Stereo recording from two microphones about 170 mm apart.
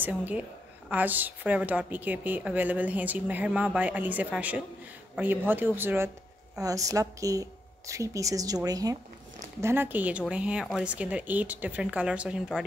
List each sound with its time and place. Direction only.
0.0 s a woman's voice: 10° right (ahead or behind)